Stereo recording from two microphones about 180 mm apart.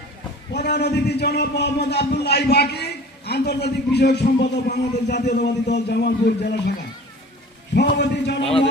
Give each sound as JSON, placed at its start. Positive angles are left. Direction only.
{"t": 0.5, "sound": "a man's voice", "side_deg": 65}
{"t": 7.8, "sound": "a man's voice", "side_deg": 70}